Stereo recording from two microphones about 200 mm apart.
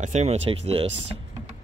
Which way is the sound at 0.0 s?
35° right (ahead or behind).